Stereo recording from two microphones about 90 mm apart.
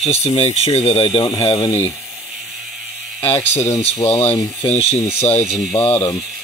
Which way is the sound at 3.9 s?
90° left.